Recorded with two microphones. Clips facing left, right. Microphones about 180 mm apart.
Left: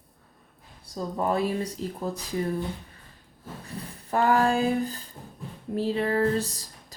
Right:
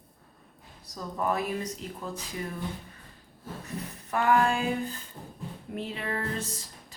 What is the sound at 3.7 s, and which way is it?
A woman's voice, 30° left (ahead or behind).